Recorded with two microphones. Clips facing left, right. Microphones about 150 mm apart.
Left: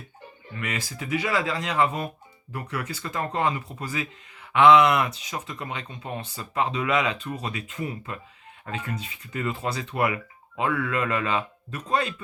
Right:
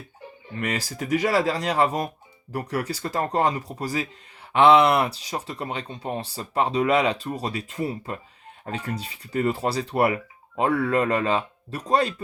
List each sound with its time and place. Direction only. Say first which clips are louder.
0.5 s speech: right 4 dB; 35° right (ahead or behind)